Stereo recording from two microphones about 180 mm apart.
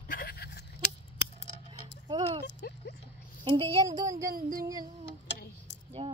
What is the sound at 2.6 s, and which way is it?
Speech, 55° left (ahead or behind).